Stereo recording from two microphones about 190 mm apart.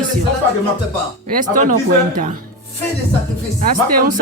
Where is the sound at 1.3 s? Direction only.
45° right (ahead or behind).